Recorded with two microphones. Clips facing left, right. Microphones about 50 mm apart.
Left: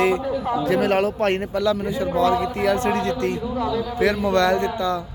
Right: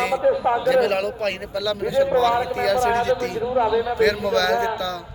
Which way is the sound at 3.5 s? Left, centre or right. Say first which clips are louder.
Right 5 dB; right.